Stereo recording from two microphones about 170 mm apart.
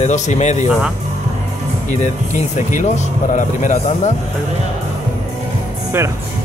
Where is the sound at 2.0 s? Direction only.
45° left (ahead or behind).